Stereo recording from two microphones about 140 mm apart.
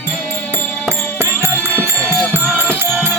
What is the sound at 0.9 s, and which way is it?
Music, 15° right (ahead or behind).